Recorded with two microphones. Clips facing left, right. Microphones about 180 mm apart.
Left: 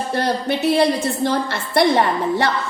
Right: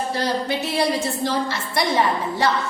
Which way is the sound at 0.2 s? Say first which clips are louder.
Left 5 dB; 55° left (ahead or behind).